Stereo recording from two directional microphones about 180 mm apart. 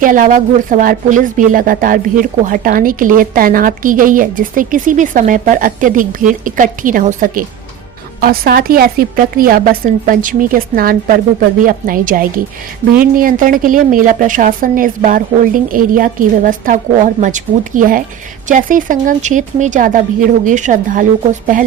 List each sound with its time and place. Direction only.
0.0 s speech: 45° right (ahead or behind)
8.2 s speech: 55° right (ahead or behind)